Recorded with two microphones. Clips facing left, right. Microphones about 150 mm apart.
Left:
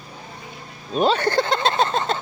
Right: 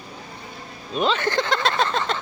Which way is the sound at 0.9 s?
40° left (ahead or behind).